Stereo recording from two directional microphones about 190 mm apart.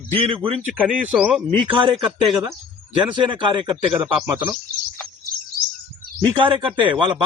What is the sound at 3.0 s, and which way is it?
A man's voice, 25° right (ahead or behind).